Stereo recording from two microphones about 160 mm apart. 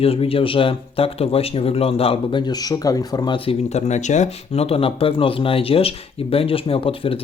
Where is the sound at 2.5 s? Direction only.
25° left (ahead or behind).